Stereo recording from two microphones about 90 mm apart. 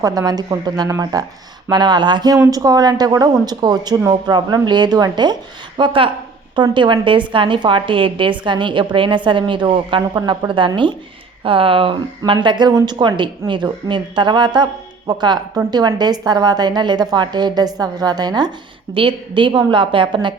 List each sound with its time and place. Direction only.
0.0 s a woman's voice: 45° right (ahead or behind)
1.7 s a woman's voice: 55° right (ahead or behind)
11.4 s a woman's voice: 80° right; by 18.5 s 50° right (ahead or behind)
18.9 s a woman's voice: 65° right (ahead or behind)